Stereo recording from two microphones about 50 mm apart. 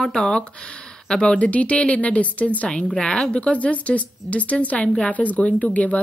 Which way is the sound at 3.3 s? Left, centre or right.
Left.